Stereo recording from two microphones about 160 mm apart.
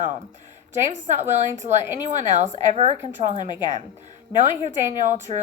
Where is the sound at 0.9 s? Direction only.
50° right (ahead or behind).